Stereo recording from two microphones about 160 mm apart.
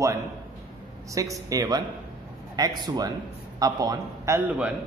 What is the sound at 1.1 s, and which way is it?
A man's voice, 20° right (ahead or behind).